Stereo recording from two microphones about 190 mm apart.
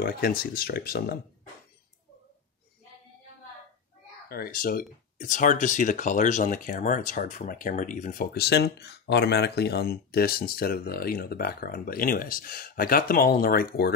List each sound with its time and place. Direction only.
0.0 s speech: 50° left (ahead or behind)
4.3 s speech: 50° left (ahead or behind)